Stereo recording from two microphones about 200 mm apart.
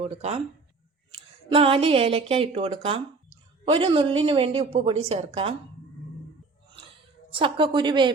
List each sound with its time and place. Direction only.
0.0 s speech: 35° right (ahead or behind)
1.5 s a woman's voice: 30° right (ahead or behind)
7.3 s a woman's voice: 25° right (ahead or behind)